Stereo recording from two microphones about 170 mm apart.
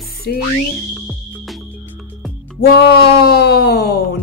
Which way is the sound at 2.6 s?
65° left (ahead or behind).